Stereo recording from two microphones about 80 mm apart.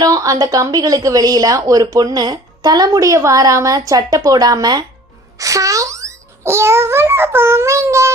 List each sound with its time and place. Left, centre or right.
0.0 s speech: right
2.9 s speech: right
5.4 s a child's voice: right